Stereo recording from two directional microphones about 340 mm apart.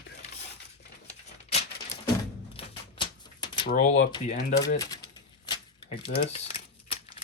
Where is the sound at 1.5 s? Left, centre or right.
Centre.